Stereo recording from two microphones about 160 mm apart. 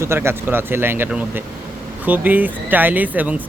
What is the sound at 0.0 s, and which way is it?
Speech, 15° right (ahead or behind).